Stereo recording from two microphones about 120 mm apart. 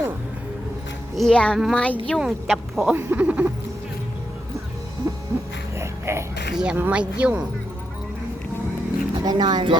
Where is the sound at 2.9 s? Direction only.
15° right (ahead or behind).